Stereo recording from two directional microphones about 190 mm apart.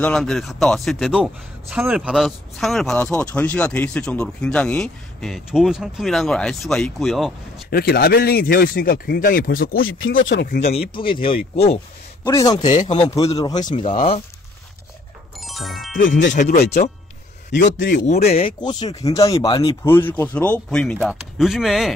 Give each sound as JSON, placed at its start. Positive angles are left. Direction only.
{"t": 0.0, "sound": "a man's voice", "side_deg": 0}
{"t": 7.7, "sound": "speech", "side_deg": 55}
{"t": 9.8, "sound": "speech", "side_deg": 90}
{"t": 10.6, "sound": "speech", "side_deg": 30}
{"t": 12.3, "sound": "speech", "side_deg": 20}
{"t": 12.6, "sound": "a man's voice", "side_deg": 35}
{"t": 15.3, "sound": "music", "side_deg": 0}
{"t": 16.2, "sound": "speech", "side_deg": 65}
{"t": 17.7, "sound": "speech", "side_deg": 65}
{"t": 18.3, "sound": "speech", "side_deg": 25}
{"t": 19.8, "sound": "a man's voice", "side_deg": 10}